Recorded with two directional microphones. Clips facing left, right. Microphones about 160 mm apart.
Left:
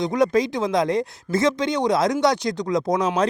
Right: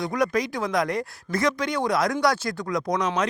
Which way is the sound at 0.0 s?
25° left (ahead or behind).